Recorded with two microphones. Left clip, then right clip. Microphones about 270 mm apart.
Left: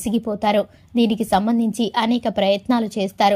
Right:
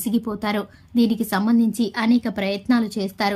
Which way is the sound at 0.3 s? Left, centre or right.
Centre.